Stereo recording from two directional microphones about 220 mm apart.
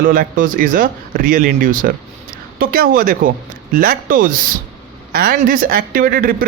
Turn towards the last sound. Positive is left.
turn(degrees=-40)  # may be behind; listen again after turning